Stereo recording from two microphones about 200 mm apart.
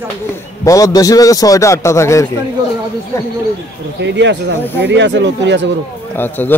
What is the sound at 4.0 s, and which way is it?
Speech, 60° right (ahead or behind).